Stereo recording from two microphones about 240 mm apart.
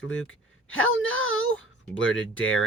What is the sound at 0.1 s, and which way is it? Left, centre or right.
Speech, left.